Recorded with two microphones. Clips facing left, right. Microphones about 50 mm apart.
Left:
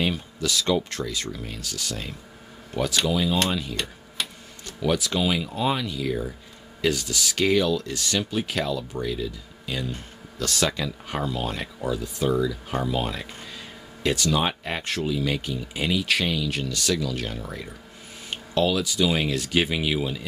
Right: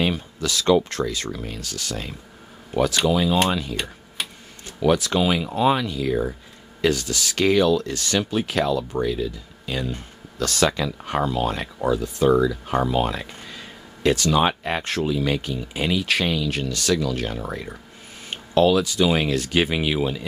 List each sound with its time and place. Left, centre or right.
0.0 s speech: right
3.1 s speech: right
3.7 s tick-tock: centre
4.8 s speech: right
10.4 s speech: right
14.4 s speech: right
18.5 s speech: right